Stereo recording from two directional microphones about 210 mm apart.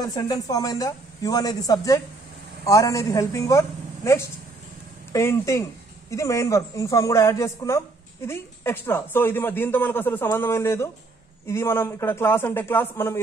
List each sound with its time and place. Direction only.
0.0 s a woman's voice: 15° left (ahead or behind)